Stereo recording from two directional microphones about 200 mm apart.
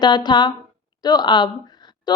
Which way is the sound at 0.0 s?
20° left (ahead or behind).